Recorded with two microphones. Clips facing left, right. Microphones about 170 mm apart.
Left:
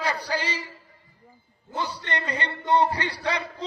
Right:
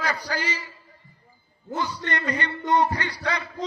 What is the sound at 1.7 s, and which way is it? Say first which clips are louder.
A man's voice: right 2 dB; 30° left (ahead or behind).